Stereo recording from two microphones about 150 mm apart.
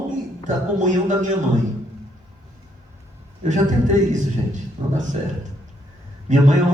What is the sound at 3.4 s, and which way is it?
A man's voice, 55° right (ahead or behind).